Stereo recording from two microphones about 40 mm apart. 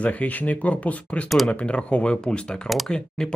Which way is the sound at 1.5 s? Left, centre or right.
Left.